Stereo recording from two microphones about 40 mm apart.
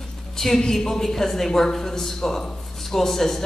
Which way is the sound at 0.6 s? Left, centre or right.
Centre.